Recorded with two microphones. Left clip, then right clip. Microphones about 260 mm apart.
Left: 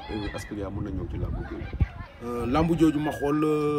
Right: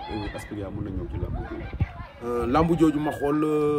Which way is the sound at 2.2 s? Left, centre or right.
Centre.